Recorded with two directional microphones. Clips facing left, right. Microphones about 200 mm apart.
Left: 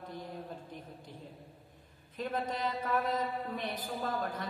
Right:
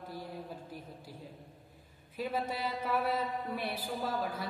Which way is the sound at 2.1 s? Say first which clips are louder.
Even; 5° right (ahead or behind).